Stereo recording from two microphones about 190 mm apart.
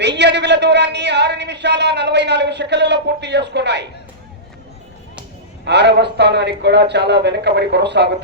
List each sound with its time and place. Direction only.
0.2 s a man's voice: 65° right (ahead or behind)
5.6 s a man's voice: 65° right (ahead or behind)